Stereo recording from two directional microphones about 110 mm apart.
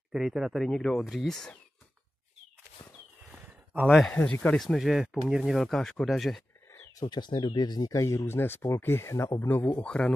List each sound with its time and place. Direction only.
0.1 s speech: 5° right (ahead or behind)
3.8 s speech: centre (ahead or behind)
4.1 s speech: 15° left (ahead or behind)
6.7 s a sound: 25° left (ahead or behind)
7.1 s speech: 45° left (ahead or behind); by 10.1 s 10° left (ahead or behind)